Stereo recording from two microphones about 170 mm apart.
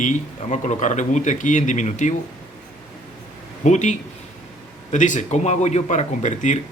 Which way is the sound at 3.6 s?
45° left (ahead or behind).